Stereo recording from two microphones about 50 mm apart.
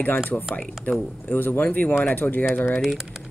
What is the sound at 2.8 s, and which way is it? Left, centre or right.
Speech, centre.